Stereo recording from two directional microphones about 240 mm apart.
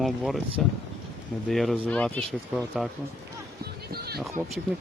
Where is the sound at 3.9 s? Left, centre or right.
Right.